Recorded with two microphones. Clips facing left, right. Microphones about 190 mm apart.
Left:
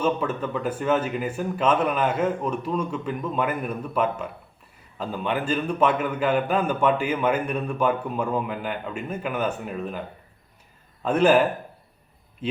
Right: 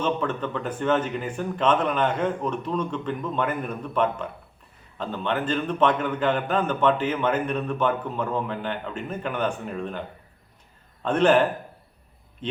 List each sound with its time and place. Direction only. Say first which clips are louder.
0.0 s speech: left 1 dB; 10° left (ahead or behind)
11.0 s a man's voice: left 1 dB; 5° left (ahead or behind)